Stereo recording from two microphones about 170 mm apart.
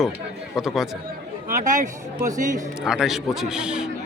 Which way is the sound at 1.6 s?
45° right (ahead or behind).